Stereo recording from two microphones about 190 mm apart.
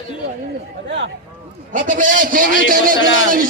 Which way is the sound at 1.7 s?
45° right (ahead or behind).